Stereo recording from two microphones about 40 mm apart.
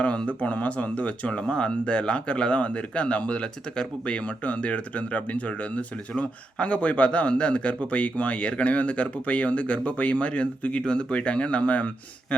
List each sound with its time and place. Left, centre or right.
0.0 s speech: left